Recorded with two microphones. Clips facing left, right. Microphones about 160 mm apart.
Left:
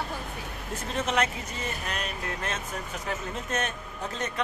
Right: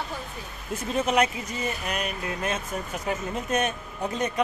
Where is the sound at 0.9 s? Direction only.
10° right (ahead or behind).